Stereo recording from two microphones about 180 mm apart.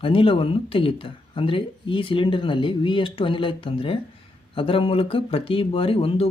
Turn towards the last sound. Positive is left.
turn(degrees=30)  # may be behind; listen again after turning